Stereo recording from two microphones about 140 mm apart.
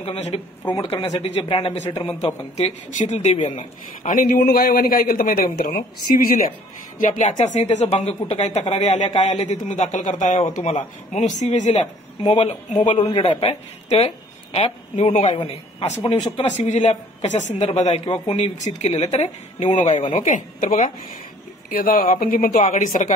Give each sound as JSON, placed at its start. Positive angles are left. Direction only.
{"t": 0.0, "sound": "speech", "side_deg": 45}
{"t": 1.1, "sound": "speech", "side_deg": 45}
{"t": 2.5, "sound": "a man's voice", "side_deg": 55}
{"t": 7.1, "sound": "speech", "side_deg": 60}
{"t": 13.1, "sound": "speech", "side_deg": 40}
{"t": 15.3, "sound": "speech", "side_deg": 40}
{"t": 16.4, "sound": "speech", "side_deg": 55}
{"t": 20.2, "sound": "speech", "side_deg": 65}
{"t": 21.6, "sound": "speech", "side_deg": 90}
{"t": 22.7, "sound": "speech", "side_deg": 65}